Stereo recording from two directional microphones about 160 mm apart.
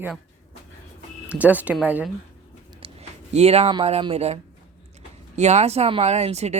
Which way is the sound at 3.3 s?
40° right (ahead or behind).